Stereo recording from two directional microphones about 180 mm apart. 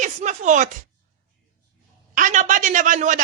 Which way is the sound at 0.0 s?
45° right (ahead or behind).